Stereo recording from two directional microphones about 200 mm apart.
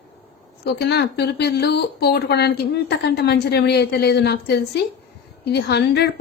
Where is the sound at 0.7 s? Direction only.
55° left (ahead or behind).